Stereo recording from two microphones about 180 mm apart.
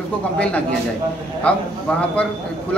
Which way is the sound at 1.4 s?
5° left (ahead or behind).